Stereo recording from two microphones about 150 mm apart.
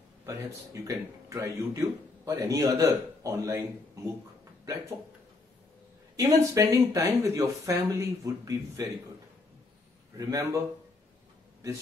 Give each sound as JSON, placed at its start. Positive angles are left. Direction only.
{"t": 0.2, "sound": "a man's voice", "side_deg": -20}
{"t": 6.1, "sound": "a man's voice", "side_deg": -20}
{"t": 10.1, "sound": "a man's voice", "side_deg": -20}